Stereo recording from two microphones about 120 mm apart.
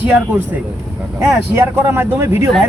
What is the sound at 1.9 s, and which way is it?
Speech, 25° right (ahead or behind).